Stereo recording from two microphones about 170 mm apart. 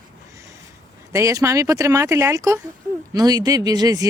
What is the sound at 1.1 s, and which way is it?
Speech, 20° right (ahead or behind).